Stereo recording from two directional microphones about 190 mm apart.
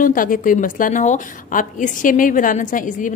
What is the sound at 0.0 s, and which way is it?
A woman's voice, 45° left (ahead or behind).